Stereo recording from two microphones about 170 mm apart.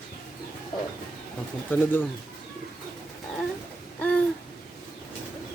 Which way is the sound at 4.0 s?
10° left (ahead or behind).